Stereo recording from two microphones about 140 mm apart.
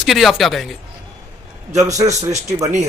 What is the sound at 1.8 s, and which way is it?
Speech, 25° right (ahead or behind).